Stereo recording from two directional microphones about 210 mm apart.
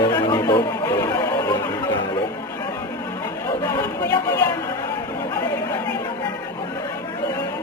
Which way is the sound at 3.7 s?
10° left (ahead or behind).